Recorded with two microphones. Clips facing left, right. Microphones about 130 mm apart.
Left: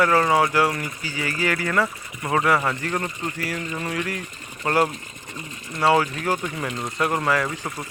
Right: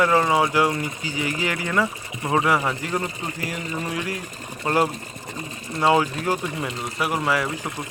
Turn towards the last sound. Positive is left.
turn(degrees=-10)  # may be behind; listen again after turning